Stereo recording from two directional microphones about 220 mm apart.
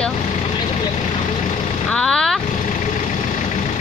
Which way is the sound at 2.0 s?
Centre (ahead or behind).